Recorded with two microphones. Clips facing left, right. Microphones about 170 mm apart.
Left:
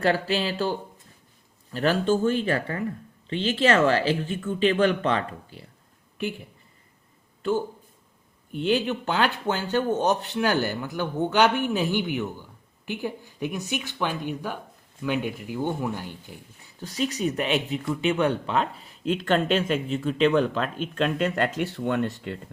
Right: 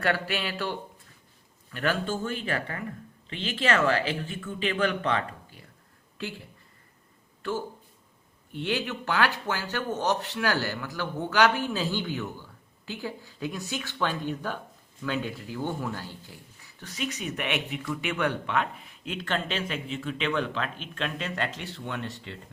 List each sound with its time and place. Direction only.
0.0 s speech: 30° left (ahead or behind)
6.1 s a woman's voice: 20° left (ahead or behind)
8.5 s speech: 20° left (ahead or behind)
16.8 s speech: 35° left (ahead or behind); by 22.4 s 50° left (ahead or behind)